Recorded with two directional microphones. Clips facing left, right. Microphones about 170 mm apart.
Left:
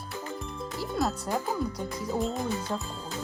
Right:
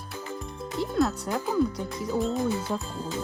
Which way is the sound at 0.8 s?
Centre (ahead or behind).